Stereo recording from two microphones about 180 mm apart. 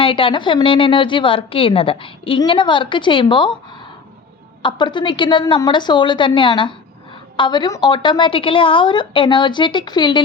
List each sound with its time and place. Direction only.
0.0 s a woman's voice: 30° left (ahead or behind)
4.6 s a woman's voice: 25° left (ahead or behind)